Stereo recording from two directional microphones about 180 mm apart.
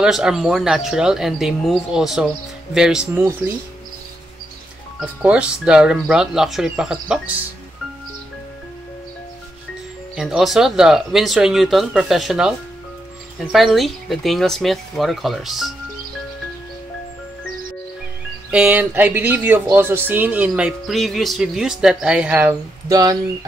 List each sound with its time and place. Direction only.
0.0 s speech: 5° right (ahead or behind)
5.0 s speech: 5° right (ahead or behind)
10.1 s speech: centre (ahead or behind)
18.5 s speech: 10° right (ahead or behind)
22.8 s speech: 20° right (ahead or behind)